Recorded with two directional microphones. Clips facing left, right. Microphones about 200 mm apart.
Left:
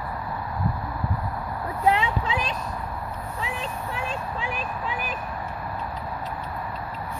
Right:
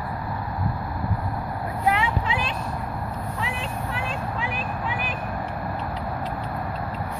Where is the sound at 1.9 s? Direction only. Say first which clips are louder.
Left 1 dB; 30° left (ahead or behind).